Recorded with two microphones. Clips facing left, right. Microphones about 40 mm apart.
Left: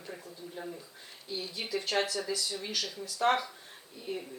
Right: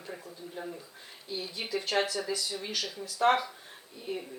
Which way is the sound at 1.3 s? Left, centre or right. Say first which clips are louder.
Right 1 dB; centre.